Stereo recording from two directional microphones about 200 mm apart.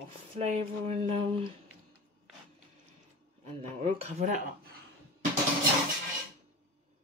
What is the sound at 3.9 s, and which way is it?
Speech, 40° right (ahead or behind).